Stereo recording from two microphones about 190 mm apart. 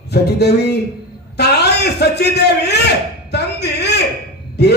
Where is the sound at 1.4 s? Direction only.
60° left (ahead or behind).